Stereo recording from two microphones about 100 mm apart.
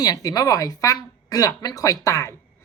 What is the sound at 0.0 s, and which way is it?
A woman's voice, 40° left (ahead or behind).